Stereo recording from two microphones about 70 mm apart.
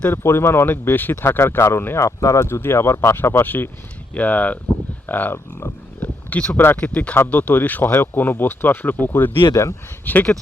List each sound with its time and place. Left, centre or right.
0.1 s speech: left
2.0 s speech: left